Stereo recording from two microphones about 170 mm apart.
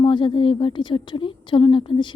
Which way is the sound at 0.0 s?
30° left (ahead or behind).